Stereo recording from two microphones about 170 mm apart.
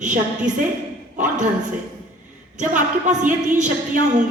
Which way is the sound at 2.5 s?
45° right (ahead or behind).